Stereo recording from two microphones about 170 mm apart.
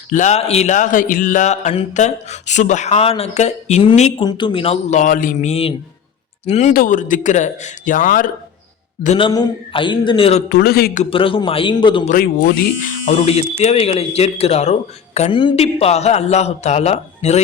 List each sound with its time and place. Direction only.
0.1 s a sound: 45° left (ahead or behind)
3.8 s speech: 40° left (ahead or behind)
4.2 s speech: 25° left (ahead or behind)
6.7 s a sound: 50° left (ahead or behind)
9.1 s speech: 25° left (ahead or behind)
10.5 s speech: 65° left (ahead or behind)
10.9 s speech: 35° left (ahead or behind)
12.0 s speech: 60° left (ahead or behind)
13.1 s speech: 35° left (ahead or behind)